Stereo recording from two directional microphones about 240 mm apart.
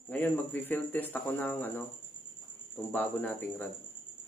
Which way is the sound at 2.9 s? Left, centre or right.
Centre.